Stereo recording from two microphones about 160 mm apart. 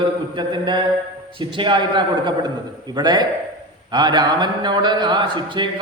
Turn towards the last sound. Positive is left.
turn(degrees=-30)  # may be behind; listen again after turning